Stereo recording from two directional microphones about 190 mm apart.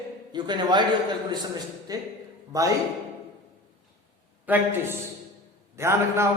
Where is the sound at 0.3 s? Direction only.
25° right (ahead or behind).